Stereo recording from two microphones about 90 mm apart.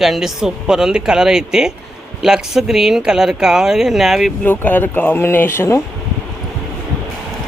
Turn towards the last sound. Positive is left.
turn(degrees=30)  # may be behind; listen again after turning